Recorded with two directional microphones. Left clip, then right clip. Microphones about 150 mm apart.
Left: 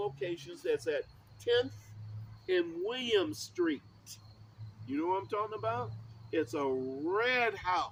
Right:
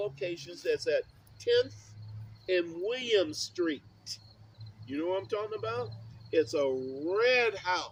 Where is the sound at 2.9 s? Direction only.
25° left (ahead or behind).